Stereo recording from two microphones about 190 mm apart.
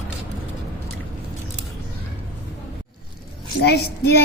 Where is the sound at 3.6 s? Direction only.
60° left (ahead or behind).